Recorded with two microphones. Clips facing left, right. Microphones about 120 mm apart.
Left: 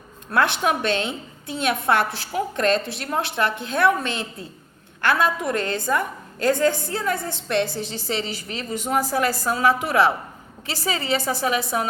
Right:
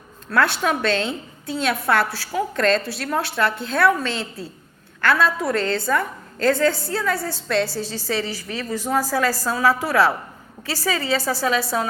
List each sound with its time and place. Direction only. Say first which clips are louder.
0.3 s a woman's voice: right 1 dB; 20° left (ahead or behind)